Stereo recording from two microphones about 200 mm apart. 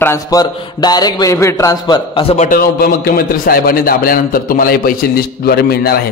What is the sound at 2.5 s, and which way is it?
A man's voice, 50° left (ahead or behind).